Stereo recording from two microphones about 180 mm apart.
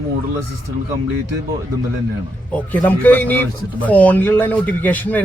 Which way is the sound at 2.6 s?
10° left (ahead or behind).